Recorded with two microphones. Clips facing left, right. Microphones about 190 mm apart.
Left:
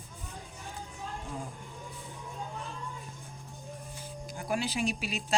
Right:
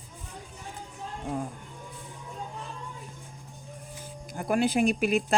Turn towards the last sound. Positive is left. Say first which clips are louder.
# right 9 dB
turn(degrees=-55)  # may be behind; listen again after turning